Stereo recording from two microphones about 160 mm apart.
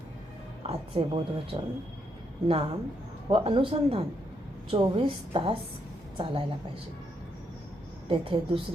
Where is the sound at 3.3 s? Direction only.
35° right (ahead or behind).